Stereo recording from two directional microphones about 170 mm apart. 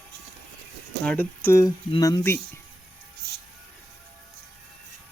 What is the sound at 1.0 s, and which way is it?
Speech, 10° left (ahead or behind).